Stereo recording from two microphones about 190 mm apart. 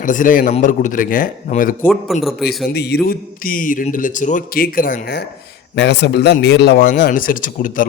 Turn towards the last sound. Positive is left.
turn(degrees=45)  # may be behind; listen again after turning